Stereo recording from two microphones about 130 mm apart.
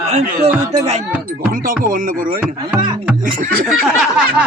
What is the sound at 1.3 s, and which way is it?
Speech, 90° right.